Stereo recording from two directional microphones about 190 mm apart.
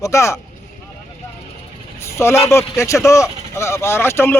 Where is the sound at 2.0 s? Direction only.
15° left (ahead or behind).